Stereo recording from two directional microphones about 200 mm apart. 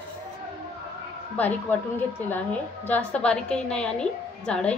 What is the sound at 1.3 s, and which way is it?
A woman's voice, 10° left (ahead or behind).